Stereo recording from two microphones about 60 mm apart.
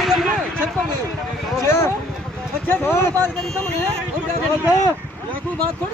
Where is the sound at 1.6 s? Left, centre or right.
Left.